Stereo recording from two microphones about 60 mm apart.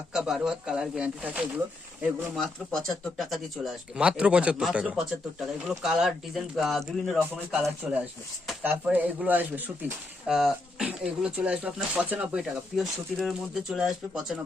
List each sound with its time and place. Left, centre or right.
0.1 s speech: centre
1.2 s speech: right
2.3 s speech: centre
3.9 s speech: centre
8.6 s speech: right
10.2 s speech: centre; by 12.4 s right
12.4 s speech: centre